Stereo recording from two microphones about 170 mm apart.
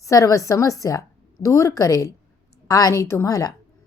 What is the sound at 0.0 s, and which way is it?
A woman's voice, 20° left (ahead or behind).